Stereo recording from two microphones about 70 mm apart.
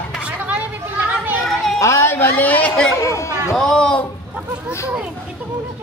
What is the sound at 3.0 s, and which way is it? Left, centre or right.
Chatter, left.